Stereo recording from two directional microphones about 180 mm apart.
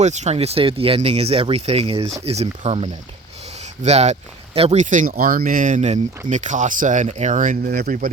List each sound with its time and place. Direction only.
0.0 s speech: 40° right (ahead or behind); by 8.1 s 55° right (ahead or behind)